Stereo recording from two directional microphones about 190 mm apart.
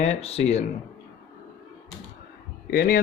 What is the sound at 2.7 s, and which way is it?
Speech, 50° left (ahead or behind).